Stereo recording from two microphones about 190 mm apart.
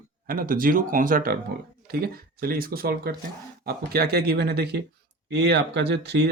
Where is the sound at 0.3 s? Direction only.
50° right (ahead or behind).